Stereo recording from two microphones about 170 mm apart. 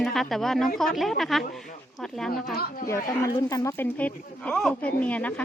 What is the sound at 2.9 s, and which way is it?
Speech, 15° left (ahead or behind).